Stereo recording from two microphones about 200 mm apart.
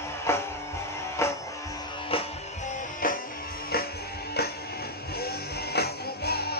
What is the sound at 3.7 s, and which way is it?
Music, 50° left (ahead or behind).